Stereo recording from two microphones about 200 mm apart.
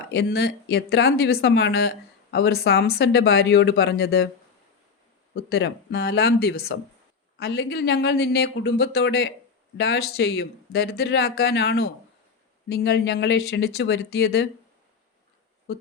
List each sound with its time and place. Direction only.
0.1 s speech: 55° left (ahead or behind)
5.3 s speech: 55° left (ahead or behind)